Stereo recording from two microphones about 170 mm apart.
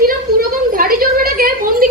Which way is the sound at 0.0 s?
55° right (ahead or behind).